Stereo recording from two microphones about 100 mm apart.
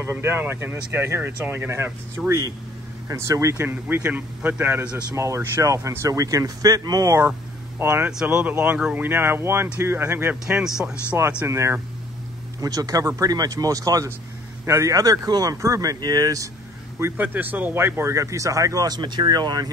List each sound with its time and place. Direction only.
0.0 s speech: 25° right (ahead or behind)
3.5 s a man's voice: 20° right (ahead or behind)
8.1 s a man's voice: 10° right (ahead or behind); by 16.4 s 35° right (ahead or behind)
17.0 s speech: 20° right (ahead or behind); by 19.7 s 45° right (ahead or behind)